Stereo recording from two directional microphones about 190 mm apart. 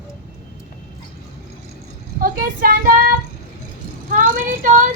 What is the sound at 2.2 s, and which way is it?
Speech, 50° right (ahead or behind).